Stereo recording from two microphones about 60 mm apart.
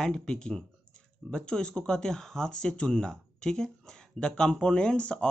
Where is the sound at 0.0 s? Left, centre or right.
Centre.